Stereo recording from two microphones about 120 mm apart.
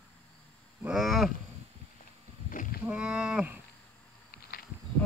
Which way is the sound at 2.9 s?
5° right (ahead or behind).